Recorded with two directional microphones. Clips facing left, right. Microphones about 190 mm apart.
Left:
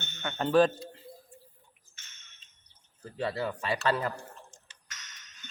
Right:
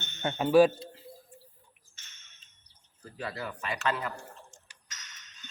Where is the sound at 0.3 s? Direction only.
10° right (ahead or behind).